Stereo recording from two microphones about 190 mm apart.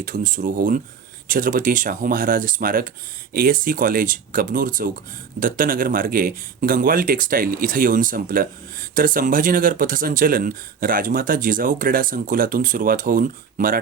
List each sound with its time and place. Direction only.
0.0 s speech: 45° right (ahead or behind)